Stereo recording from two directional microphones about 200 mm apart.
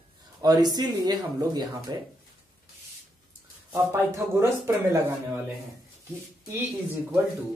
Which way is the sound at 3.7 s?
15° right (ahead or behind).